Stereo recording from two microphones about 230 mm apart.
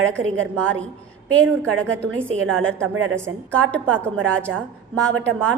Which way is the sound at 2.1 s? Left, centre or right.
Right.